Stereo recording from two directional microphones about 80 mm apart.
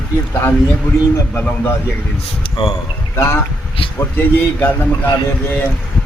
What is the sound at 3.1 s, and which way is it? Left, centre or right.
A man's voice, left.